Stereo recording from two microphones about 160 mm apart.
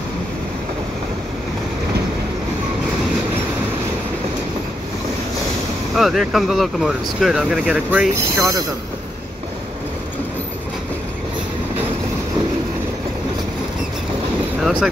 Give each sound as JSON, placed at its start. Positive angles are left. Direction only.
{"t": 5.9, "sound": "speech", "side_deg": 0}
{"t": 8.4, "sound": "speech", "side_deg": -20}
{"t": 14.6, "sound": "vehicle", "side_deg": -5}